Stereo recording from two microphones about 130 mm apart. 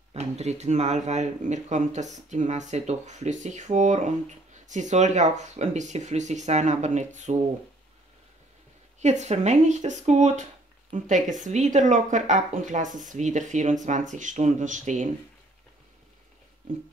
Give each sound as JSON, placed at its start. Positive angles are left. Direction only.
{"t": 0.1, "sound": "speech", "side_deg": -60}
{"t": 9.0, "sound": "speech", "side_deg": -60}
{"t": 11.4, "sound": "speech", "side_deg": -70}